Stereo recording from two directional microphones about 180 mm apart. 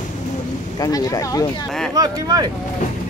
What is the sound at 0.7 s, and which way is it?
Speech, 20° left (ahead or behind).